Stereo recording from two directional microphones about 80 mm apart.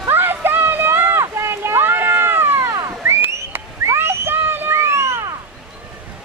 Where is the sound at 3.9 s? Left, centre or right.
Right.